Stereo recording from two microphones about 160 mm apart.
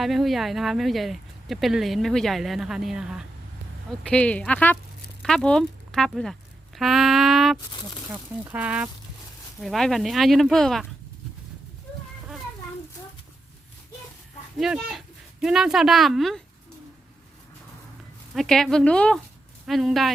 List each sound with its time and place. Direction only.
0.0 s speech: centre (ahead or behind)
4.1 s speech: 10° left (ahead or behind)
7.7 s speech: 30° left (ahead or behind)
8.1 s speech: 10° right (ahead or behind)
9.6 s speech: centre (ahead or behind)
14.6 s speech: 5° right (ahead or behind)
18.3 s speech: centre (ahead or behind)